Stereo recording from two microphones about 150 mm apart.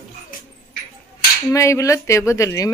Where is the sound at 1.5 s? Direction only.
20° left (ahead or behind).